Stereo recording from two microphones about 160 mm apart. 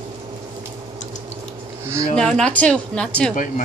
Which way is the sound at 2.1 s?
5° left (ahead or behind).